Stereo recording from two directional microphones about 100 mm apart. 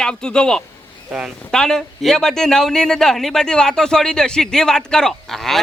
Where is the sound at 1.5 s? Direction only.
5° left (ahead or behind).